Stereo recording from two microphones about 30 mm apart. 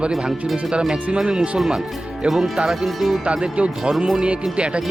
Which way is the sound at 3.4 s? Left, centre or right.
Right.